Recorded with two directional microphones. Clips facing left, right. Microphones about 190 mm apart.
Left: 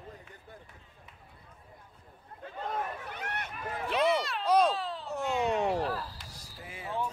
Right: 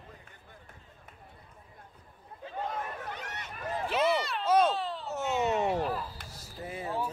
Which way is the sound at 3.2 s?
60° left (ahead or behind).